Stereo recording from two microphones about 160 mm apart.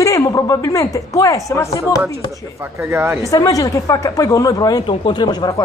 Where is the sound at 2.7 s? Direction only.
15° right (ahead or behind).